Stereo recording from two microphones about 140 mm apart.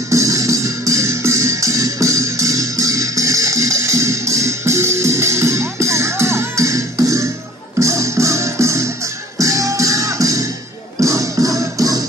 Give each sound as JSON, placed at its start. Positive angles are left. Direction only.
{"t": 0.1, "sound": "music", "side_deg": -20}